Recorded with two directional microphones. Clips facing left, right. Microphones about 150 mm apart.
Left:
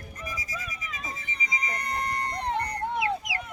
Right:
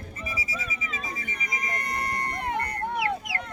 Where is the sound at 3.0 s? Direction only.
15° left (ahead or behind).